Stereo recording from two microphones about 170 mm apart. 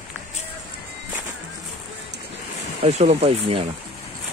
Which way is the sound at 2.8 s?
40° right (ahead or behind).